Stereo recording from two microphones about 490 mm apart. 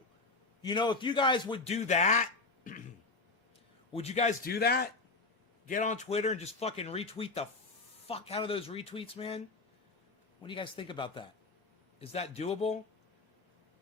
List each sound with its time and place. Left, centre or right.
0.6 s speech: centre
2.7 s a sound: centre
3.9 s speech: centre
10.4 s speech: centre